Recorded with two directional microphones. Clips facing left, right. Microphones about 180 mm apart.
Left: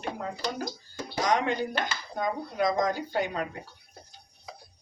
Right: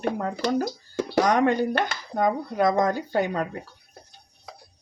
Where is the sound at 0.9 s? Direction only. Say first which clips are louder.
Right 6 dB; 70° right (ahead or behind).